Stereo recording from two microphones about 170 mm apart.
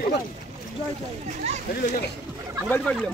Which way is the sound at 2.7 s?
5° left (ahead or behind).